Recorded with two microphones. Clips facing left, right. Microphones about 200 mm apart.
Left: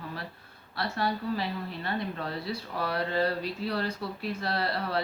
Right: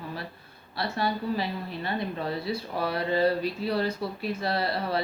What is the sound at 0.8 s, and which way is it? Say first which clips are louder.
A woman's voice: right 2 dB; 10° right (ahead or behind).